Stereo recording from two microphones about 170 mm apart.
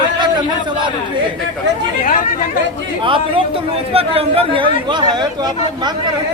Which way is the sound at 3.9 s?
35° right (ahead or behind).